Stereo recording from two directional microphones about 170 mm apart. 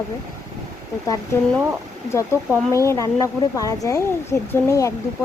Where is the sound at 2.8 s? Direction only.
20° left (ahead or behind).